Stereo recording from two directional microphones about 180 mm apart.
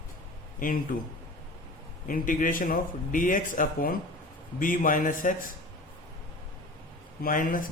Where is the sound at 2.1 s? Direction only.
50° left (ahead or behind).